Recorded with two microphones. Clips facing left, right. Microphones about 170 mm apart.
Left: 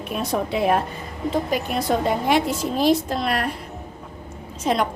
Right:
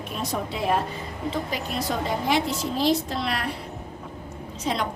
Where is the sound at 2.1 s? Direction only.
55° left (ahead or behind).